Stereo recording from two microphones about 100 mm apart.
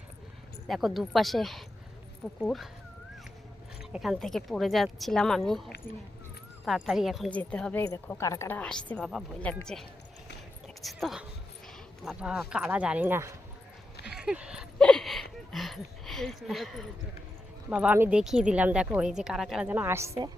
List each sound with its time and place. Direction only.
0.7 s speech: centre (ahead or behind)
3.9 s speech: centre (ahead or behind)
7.3 s speech: 15° left (ahead or behind)
8.2 s a woman's voice: 30° left (ahead or behind)
8.4 s speech: 15° left (ahead or behind)
10.8 s a sound: centre (ahead or behind)
12.0 s speech: 5° right (ahead or behind); by 13.3 s 25° right (ahead or behind)
14.0 s a sound: 5° right (ahead or behind)
14.8 s a sound: 5° left (ahead or behind)
17.7 s speech: 15° right (ahead or behind)
18.1 s speech: 5° right (ahead or behind)
19.7 s a woman's voice: 25° right (ahead or behind)